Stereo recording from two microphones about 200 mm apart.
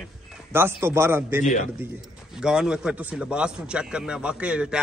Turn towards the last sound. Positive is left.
turn(degrees=-5)  # may be behind; listen again after turning